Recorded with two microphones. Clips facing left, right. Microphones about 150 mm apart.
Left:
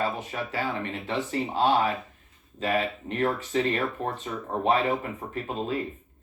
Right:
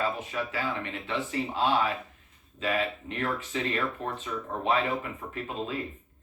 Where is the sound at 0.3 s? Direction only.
35° left (ahead or behind).